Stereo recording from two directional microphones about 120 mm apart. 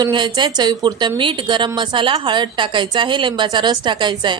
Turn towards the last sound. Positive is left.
turn(degrees=-40)  # may be behind; listen again after turning